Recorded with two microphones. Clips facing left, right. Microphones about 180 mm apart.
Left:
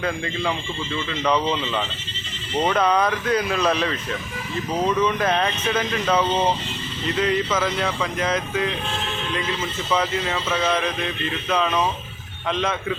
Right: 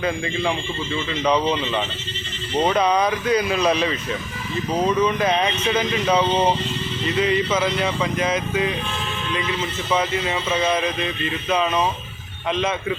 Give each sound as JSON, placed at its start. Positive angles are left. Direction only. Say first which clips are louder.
{"t": 1.2, "sound": "speech", "louder": "right 2 dB", "side_deg": -15}
{"t": 4.9, "sound": "speech", "louder": "right 1 dB", "side_deg": -15}
{"t": 9.9, "sound": "speech", "louder": "right 1 dB", "side_deg": -10}